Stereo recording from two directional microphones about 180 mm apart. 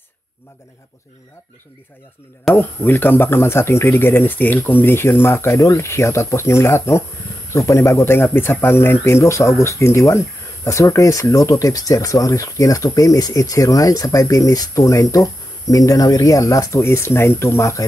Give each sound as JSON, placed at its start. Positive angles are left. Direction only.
{"t": 2.5, "sound": "speech", "side_deg": 10}